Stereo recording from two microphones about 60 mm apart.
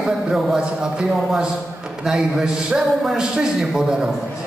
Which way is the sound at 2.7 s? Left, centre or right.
Centre.